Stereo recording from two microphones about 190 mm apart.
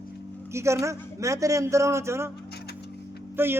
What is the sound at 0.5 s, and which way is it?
Speech, 15° right (ahead or behind).